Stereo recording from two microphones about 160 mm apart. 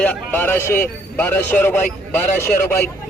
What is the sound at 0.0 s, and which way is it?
A man's voice, 10° left (ahead or behind).